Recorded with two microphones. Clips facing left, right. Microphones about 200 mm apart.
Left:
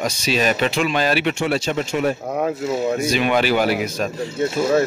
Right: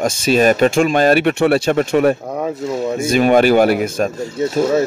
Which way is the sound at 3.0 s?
50° right (ahead or behind).